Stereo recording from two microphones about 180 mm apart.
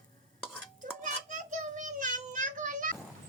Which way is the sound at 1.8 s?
45° right (ahead or behind).